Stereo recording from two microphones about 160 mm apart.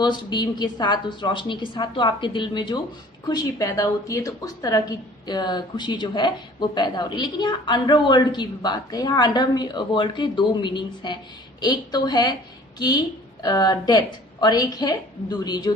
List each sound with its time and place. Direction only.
0.0 s a woman's voice: 25° left (ahead or behind)
13.4 s a woman's voice: 25° left (ahead or behind)